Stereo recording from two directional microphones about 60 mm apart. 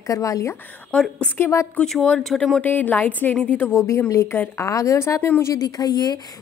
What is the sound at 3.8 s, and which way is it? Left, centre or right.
Speech, left.